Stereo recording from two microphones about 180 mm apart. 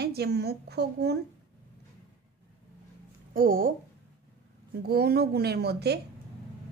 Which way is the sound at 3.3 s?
50° right (ahead or behind).